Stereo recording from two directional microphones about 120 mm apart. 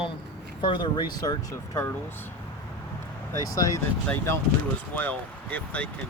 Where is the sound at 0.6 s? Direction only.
40° left (ahead or behind); by 1.9 s 25° left (ahead or behind).